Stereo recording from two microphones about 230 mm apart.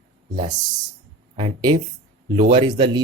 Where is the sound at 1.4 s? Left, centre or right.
Right.